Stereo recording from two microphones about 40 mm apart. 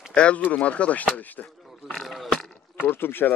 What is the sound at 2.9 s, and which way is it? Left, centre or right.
Speech, left.